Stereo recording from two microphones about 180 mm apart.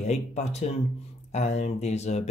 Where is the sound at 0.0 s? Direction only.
40° left (ahead or behind).